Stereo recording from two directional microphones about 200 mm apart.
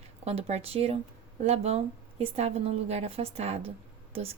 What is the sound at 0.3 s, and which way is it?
A woman's voice, 30° right (ahead or behind).